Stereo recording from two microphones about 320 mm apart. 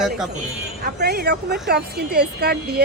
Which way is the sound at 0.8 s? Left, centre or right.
Right.